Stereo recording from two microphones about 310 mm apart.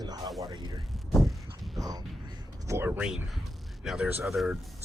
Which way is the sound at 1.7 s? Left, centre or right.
Centre.